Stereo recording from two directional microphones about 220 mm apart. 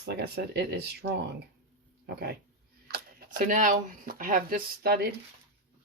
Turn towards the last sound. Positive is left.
turn(degrees=-45)  # may be behind; listen again after turning